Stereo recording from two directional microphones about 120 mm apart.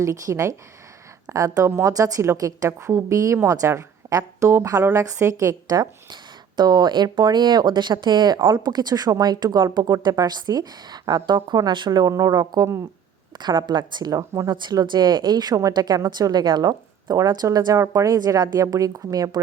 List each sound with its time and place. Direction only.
0.0 s a woman's voice: 25° right (ahead or behind)